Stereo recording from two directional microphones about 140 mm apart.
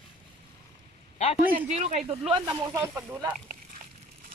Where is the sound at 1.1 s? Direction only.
45° left (ahead or behind).